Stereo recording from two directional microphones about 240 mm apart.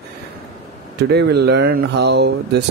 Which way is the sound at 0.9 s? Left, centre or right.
Right.